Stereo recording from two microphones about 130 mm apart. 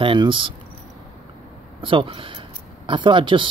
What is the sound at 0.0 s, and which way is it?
Speech, 40° right (ahead or behind).